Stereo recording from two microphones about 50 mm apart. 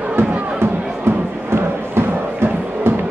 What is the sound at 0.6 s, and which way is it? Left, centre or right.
Music, right.